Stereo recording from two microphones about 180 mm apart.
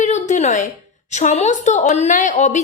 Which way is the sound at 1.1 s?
40° left (ahead or behind).